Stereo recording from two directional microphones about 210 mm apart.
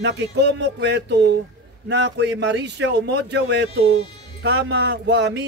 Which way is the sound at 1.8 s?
55° right (ahead or behind).